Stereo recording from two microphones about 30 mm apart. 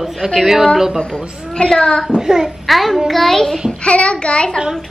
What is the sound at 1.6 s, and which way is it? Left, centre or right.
Speech, left.